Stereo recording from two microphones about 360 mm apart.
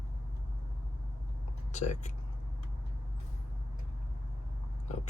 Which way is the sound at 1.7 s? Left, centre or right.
Centre.